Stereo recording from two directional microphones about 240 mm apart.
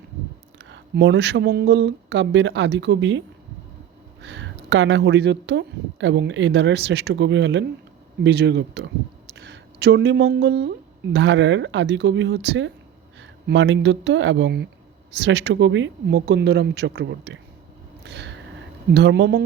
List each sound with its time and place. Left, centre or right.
0.6 s speech: right
18.0 s a sound: right
18.9 s speech: right